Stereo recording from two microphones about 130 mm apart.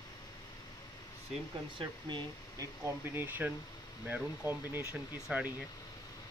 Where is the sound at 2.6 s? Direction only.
15° right (ahead or behind).